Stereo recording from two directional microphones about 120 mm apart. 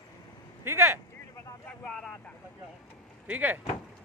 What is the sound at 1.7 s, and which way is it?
Vehicle, 5° left (ahead or behind).